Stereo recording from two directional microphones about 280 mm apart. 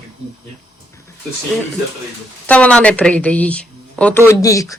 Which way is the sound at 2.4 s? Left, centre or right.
Centre.